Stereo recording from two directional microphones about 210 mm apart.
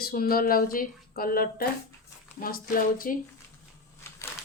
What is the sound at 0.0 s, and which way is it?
A woman's voice, 45° left (ahead or behind).